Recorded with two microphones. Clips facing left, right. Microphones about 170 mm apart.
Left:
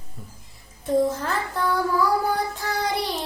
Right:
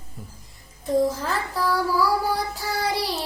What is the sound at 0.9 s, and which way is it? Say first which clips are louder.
Child singing: even; centre (ahead or behind).